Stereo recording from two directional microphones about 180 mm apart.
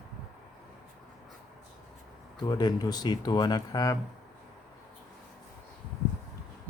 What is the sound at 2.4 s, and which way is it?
Speech, 25° left (ahead or behind).